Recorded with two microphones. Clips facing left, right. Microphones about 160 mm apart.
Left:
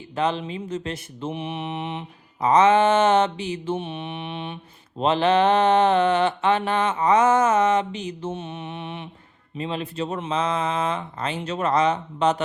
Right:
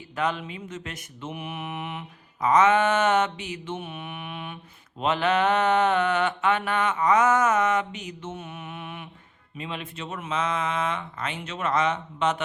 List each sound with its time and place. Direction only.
0.2 s mantra: 30° left (ahead or behind)
9.6 s speech: 35° left (ahead or behind)